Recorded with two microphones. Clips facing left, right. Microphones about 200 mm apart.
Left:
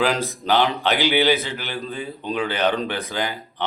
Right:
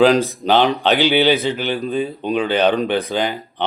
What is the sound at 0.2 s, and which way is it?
Speech, 20° right (ahead or behind).